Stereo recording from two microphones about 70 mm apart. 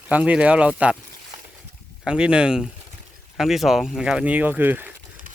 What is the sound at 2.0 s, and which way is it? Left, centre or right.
Speech, centre.